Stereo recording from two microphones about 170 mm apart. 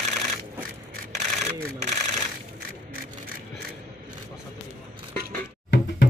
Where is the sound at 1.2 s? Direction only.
45° right (ahead or behind).